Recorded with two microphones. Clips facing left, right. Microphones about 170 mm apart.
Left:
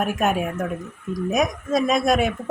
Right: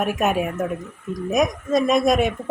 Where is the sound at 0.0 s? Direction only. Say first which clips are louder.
Right 1 dB; centre (ahead or behind).